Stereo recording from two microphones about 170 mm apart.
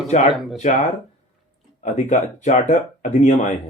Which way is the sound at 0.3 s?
Centre (ahead or behind).